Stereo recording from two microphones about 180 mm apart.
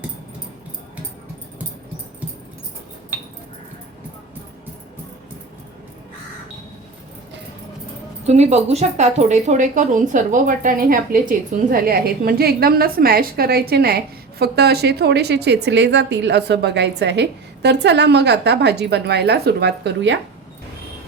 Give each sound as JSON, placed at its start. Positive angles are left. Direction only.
{"t": 8.3, "sound": "a woman's voice", "side_deg": -40}